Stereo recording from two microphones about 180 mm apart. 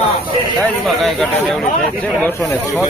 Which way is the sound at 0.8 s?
Centre (ahead or behind).